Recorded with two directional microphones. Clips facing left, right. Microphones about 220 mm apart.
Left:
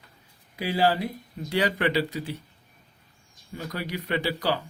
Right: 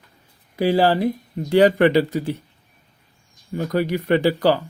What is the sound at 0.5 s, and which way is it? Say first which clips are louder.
A man's voice: right 7 dB; 45° right (ahead or behind).